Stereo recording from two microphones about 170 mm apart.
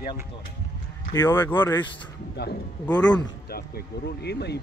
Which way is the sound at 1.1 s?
15° left (ahead or behind).